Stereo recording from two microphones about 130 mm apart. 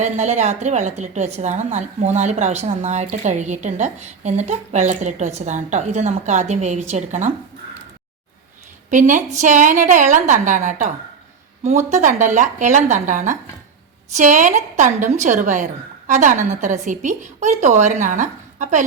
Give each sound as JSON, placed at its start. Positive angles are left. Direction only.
{"t": 0.0, "sound": "a woman's voice", "side_deg": -60}
{"t": 8.9, "sound": "a woman's voice", "side_deg": -80}